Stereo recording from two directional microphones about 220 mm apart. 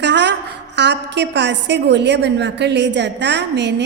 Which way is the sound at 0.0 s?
50° right (ahead or behind).